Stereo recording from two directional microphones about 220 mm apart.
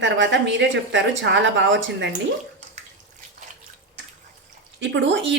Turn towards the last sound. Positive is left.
turn(degrees=-55)  # may be behind; listen again after turning